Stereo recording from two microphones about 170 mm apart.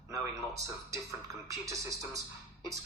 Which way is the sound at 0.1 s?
20° right (ahead or behind).